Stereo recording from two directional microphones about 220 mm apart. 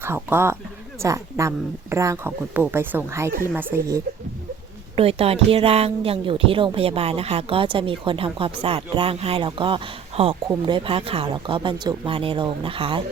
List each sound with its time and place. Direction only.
0.0 s speech: 10° right (ahead or behind)
4.9 s speech: 25° right (ahead or behind)